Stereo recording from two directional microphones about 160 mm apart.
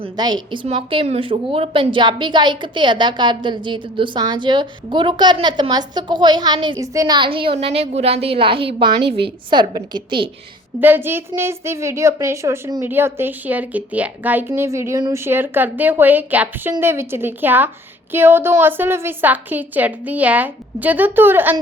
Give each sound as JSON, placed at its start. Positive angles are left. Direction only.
{"t": 0.0, "sound": "a woman's voice", "side_deg": -25}
{"t": 10.8, "sound": "a woman's voice", "side_deg": -10}